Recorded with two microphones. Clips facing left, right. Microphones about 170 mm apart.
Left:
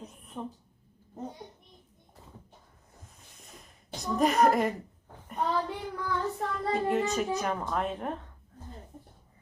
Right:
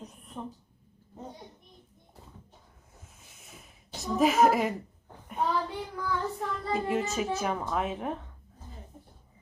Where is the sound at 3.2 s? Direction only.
5° right (ahead or behind).